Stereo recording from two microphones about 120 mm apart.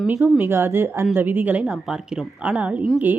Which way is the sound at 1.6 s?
Centre (ahead or behind).